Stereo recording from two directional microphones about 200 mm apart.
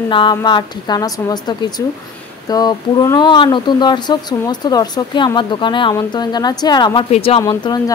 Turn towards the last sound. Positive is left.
turn(degrees=20)  # may be behind; listen again after turning